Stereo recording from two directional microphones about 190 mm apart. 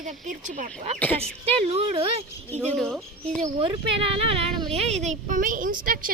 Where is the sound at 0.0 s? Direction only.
40° right (ahead or behind).